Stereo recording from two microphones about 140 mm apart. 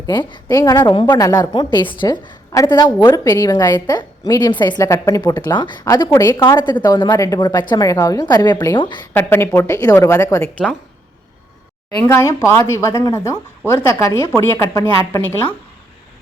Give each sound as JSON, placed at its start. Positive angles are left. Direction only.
{"t": 0.0, "sound": "a woman's voice", "side_deg": 30}
{"t": 9.1, "sound": "speech", "side_deg": 15}
{"t": 12.0, "sound": "speech", "side_deg": 20}